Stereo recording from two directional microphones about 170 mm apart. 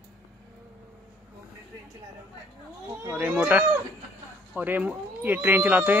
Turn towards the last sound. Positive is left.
turn(degrees=-10)  # may be behind; listen again after turning